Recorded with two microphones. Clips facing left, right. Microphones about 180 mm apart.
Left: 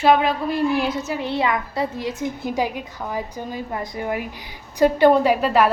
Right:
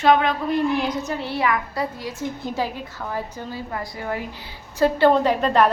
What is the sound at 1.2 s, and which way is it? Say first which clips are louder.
A woman's voice: left 1 dB; 25° left (ahead or behind).